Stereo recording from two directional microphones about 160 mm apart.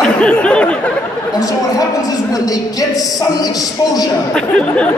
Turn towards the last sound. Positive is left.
turn(degrees=5)  # may be behind; listen again after turning